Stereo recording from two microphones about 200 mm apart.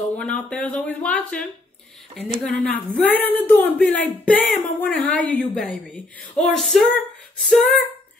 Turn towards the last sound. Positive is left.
turn(degrees=5)  # may be behind; listen again after turning